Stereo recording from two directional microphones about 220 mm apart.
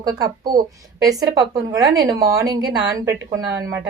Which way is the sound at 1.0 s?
15° right (ahead or behind).